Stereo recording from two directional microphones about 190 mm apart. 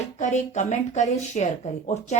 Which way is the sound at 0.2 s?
40° left (ahead or behind).